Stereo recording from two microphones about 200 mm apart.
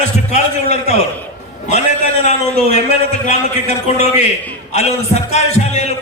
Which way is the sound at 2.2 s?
35° left (ahead or behind).